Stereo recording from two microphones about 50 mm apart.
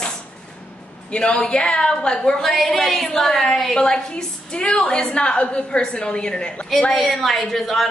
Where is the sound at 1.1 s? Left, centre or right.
Left.